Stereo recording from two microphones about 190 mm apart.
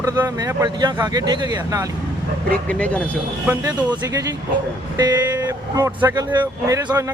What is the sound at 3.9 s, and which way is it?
Speech, 15° right (ahead or behind).